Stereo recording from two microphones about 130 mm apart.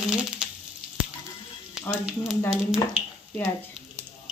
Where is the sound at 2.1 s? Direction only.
5° right (ahead or behind).